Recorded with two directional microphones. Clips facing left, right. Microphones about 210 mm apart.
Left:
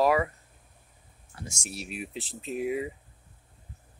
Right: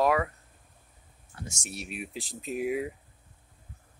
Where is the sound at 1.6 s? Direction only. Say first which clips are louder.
Left 1 dB; centre (ahead or behind).